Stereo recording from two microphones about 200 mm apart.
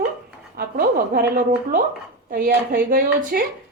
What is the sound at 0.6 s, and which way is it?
A woman's voice, 50° right (ahead or behind).